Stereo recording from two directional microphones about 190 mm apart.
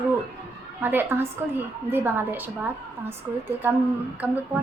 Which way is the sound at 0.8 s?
10° right (ahead or behind).